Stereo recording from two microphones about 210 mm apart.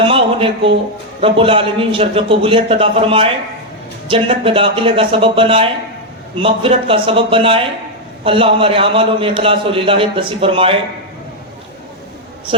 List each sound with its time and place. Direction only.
0.0 s music: 25° right (ahead or behind)
1.2 s a man's voice: 25° right (ahead or behind)